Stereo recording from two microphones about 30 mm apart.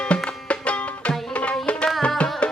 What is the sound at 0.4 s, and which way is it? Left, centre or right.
Music, left.